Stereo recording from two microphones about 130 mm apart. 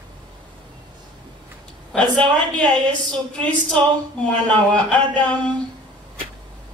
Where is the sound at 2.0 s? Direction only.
35° right (ahead or behind).